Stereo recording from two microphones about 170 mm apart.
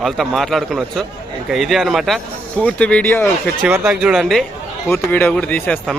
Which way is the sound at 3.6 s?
5° right (ahead or behind).